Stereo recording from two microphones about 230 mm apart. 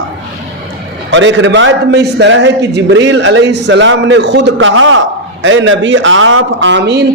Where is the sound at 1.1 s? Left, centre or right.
Right.